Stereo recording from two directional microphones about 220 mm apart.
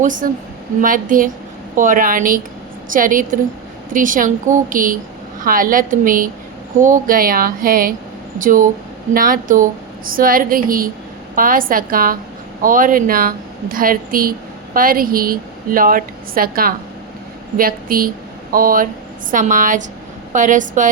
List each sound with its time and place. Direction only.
0.0 s speech: 35° right (ahead or behind)